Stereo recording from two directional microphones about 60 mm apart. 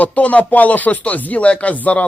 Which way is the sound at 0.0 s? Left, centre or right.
Left.